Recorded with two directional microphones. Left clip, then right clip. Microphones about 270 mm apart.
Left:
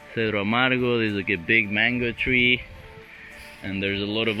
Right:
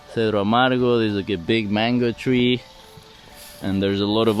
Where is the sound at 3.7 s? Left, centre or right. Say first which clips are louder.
Right 5 dB; right.